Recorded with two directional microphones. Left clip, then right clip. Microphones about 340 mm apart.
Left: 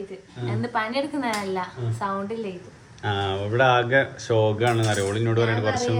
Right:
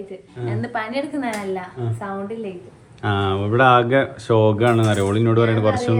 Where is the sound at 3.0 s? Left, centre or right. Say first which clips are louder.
Right 5 dB; centre.